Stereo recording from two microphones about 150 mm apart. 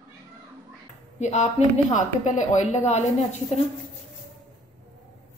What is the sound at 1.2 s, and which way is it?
Speech, 50° left (ahead or behind).